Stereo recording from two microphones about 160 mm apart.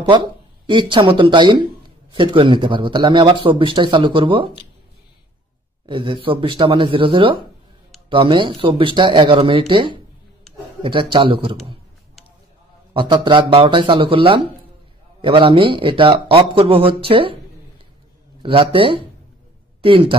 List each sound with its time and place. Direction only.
0.7 s speech: 30° right (ahead or behind)
5.9 s speech: 30° right (ahead or behind)
12.9 s speech: 30° right (ahead or behind)
18.4 s speech: 35° right (ahead or behind)